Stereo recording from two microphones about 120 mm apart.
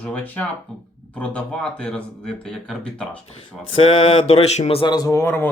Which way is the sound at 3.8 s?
50° left (ahead or behind).